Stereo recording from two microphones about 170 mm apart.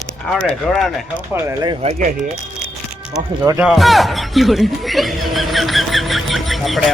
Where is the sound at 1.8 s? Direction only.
35° right (ahead or behind).